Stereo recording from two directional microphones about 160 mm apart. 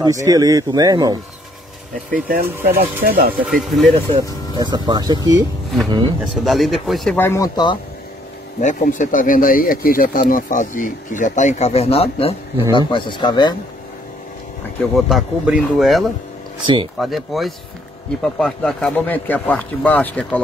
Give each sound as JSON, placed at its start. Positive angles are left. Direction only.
{"t": 0.0, "sound": "speech", "side_deg": -20}
{"t": 2.0, "sound": "speech", "side_deg": -60}
{"t": 3.4, "sound": "speech", "side_deg": 0}
{"t": 4.2, "sound": "speech", "side_deg": -25}
{"t": 6.3, "sound": "speech", "side_deg": 0}
{"t": 7.2, "sound": "speech", "side_deg": 15}
{"t": 8.7, "sound": "speech", "side_deg": 55}
{"t": 14.8, "sound": "speech", "side_deg": 0}
{"t": 16.6, "sound": "speech", "side_deg": -35}
{"t": 17.0, "sound": "a man's voice", "side_deg": 0}